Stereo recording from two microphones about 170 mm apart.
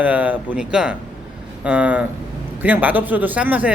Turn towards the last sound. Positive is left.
turn(degrees=-10)  # may be behind; listen again after turning